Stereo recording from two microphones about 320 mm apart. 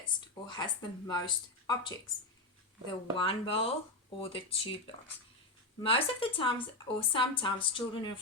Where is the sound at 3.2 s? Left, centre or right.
Centre.